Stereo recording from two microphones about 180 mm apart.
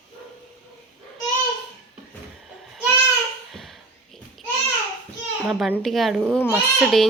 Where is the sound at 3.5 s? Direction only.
Centre (ahead or behind).